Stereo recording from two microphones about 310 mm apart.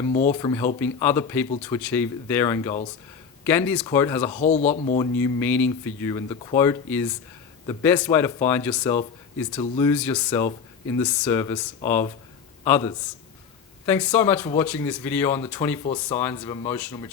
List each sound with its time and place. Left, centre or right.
0.0 s speech: left
0.3 s speech: centre
4.3 s speech: left
5.2 s speech: centre
9.9 s a man's voice: centre
15.8 s speech: centre